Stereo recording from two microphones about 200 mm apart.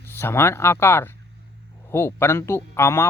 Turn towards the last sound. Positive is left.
turn(degrees=10)  # may be behind; listen again after turning